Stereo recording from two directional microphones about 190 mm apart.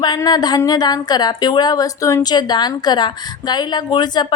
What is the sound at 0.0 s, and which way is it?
Speech, 20° left (ahead or behind).